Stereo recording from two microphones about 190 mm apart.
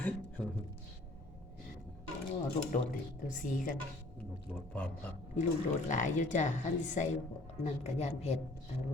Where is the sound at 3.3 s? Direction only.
45° left (ahead or behind).